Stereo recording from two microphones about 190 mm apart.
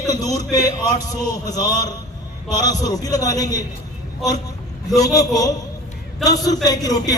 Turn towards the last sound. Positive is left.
turn(degrees=20)  # may be behind; listen again after turning